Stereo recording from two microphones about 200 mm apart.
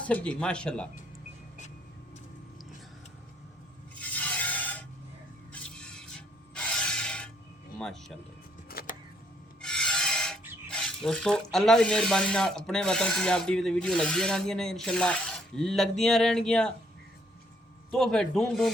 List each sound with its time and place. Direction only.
0.0 s speech: 5° left (ahead or behind)
4.0 s a sound: 10° left (ahead or behind)
5.5 s mechanisms: 5° left (ahead or behind)
7.8 s speech: centre (ahead or behind)
8.7 s vehicle: 50° left (ahead or behind)
9.6 s rub: 5° left (ahead or behind)
10.7 s speech: 5° left (ahead or behind)
17.9 s speech: centre (ahead or behind)